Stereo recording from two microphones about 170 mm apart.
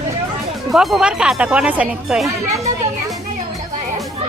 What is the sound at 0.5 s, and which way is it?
Speech, centre (ahead or behind).